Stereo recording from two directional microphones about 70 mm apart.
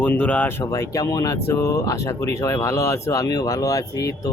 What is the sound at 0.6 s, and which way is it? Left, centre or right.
Speech, left.